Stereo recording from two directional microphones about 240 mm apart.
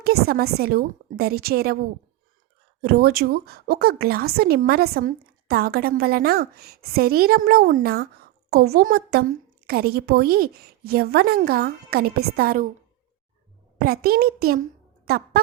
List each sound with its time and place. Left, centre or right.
0.0 s a woman's voice: right
2.8 s a woman's voice: right
13.7 s a woman's voice: right
15.0 s a sound: right